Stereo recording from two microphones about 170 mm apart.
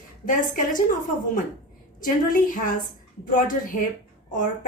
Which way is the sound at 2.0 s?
55° left (ahead or behind).